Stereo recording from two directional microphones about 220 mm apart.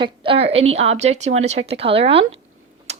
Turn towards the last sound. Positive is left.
turn(degrees=-30)  # may be behind; listen again after turning